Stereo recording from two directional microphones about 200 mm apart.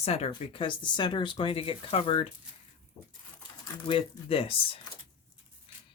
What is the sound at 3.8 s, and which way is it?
Speech, 25° left (ahead or behind).